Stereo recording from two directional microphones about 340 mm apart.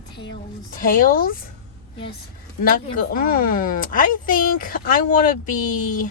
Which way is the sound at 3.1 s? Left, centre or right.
Left.